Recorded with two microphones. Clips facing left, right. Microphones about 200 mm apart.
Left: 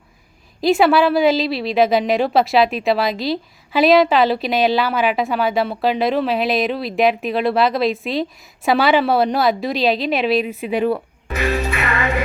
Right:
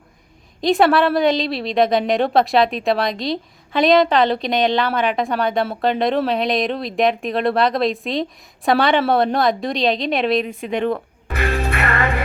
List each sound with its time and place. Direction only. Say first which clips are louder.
0.6 s a woman's voice: left 1 dB; centre (ahead or behind)
11.3 s music: left 1 dB; 60° right (ahead or behind)